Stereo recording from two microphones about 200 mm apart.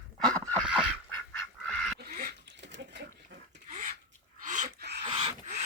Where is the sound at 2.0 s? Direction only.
45° right (ahead or behind).